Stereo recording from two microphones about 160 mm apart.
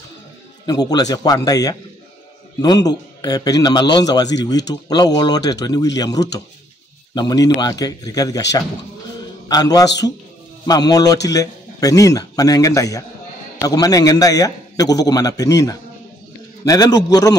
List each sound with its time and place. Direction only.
0.7 s a man's voice: 25° left (ahead or behind)